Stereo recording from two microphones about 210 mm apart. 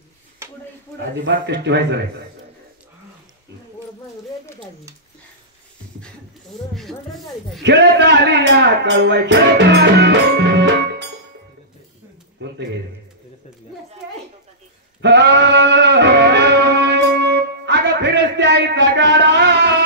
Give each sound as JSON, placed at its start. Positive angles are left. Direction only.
{"t": 1.2, "sound": "speech", "side_deg": -55}
{"t": 6.7, "sound": "speech", "side_deg": 0}
{"t": 7.6, "sound": "speech", "side_deg": -55}
{"t": 15.0, "sound": "music", "side_deg": -55}